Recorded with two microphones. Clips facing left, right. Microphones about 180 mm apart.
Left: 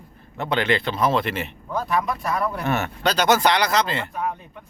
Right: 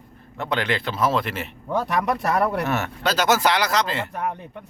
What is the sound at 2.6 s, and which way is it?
Speech, centre (ahead or behind).